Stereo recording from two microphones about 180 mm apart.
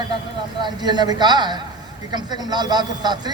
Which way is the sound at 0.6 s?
25° right (ahead or behind).